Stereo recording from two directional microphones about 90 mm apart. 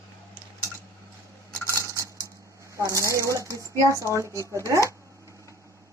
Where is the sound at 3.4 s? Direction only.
35° left (ahead or behind).